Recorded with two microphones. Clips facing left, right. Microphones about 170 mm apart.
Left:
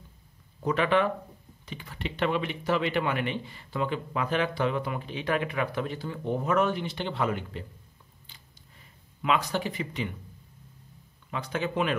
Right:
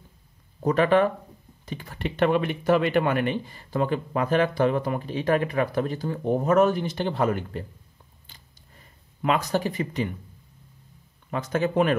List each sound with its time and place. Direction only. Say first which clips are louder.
0.6 s speech: right 5 dB; 45° right (ahead or behind)
8.3 s a sound: right 2 dB; 45° right (ahead or behind)
11.2 s speech: right 6 dB; 45° right (ahead or behind)